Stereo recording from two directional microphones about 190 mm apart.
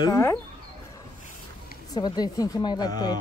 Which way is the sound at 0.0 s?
20° left (ahead or behind).